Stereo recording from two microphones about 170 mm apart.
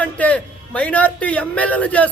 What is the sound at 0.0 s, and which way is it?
A man's voice, 10° left (ahead or behind).